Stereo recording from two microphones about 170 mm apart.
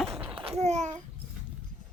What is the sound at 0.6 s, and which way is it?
Speech, 40° right (ahead or behind).